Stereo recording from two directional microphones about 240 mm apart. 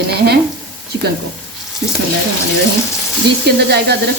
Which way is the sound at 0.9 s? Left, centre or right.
Right.